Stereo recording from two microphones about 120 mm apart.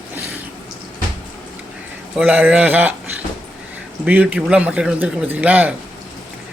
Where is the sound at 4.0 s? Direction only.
15° right (ahead or behind).